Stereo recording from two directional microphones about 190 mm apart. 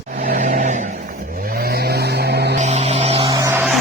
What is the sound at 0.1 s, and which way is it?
Vehicle, 50° right (ahead or behind).